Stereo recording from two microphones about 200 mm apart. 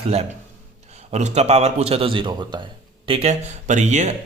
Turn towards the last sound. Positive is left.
turn(degrees=-35)  # may be behind; listen again after turning